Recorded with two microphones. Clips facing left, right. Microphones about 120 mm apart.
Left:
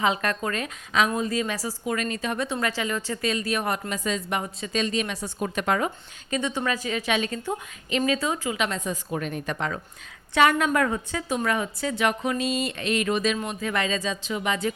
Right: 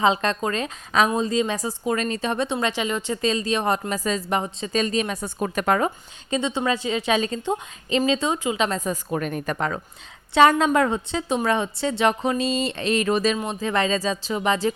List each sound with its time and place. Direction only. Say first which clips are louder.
0.0 s a woman's voice: right 4 dB; 25° right (ahead or behind)
3.8 s speech: right 3 dB; 40° right (ahead or behind)
5.1 s speech: right 3 dB; 50° right (ahead or behind)
6.3 s a woman's voice: right 3 dB; 20° right (ahead or behind); by 9.8 s 45° right (ahead or behind)
10.3 s speech: right 4 dB; 30° right (ahead or behind)
10.8 s a woman's voice: right 3 dB; 25° right (ahead or behind)